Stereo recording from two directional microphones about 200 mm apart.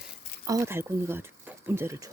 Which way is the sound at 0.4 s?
15° right (ahead or behind).